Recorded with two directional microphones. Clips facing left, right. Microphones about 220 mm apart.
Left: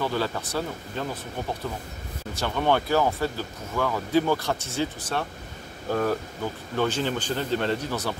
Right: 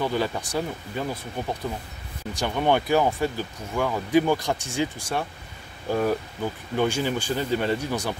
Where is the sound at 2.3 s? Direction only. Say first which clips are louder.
Right 1 dB; 15° right (ahead or behind).